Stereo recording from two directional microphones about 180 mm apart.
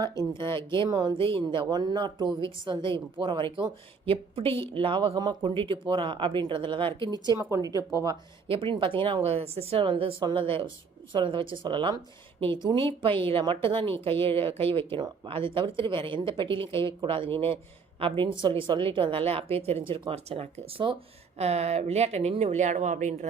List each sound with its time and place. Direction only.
0.3 s speech: 25° right (ahead or behind)
8.4 s speech: 30° right (ahead or behind)